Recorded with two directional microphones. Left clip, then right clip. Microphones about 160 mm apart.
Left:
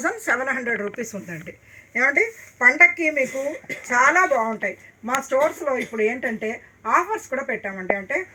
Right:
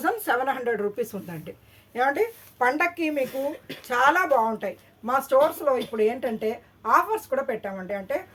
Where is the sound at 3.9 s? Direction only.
45° right (ahead or behind).